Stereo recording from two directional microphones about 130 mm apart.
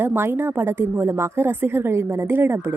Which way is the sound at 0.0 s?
15° right (ahead or behind).